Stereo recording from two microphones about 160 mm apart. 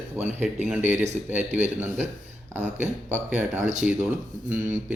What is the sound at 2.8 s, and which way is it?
Speech, 45° right (ahead or behind).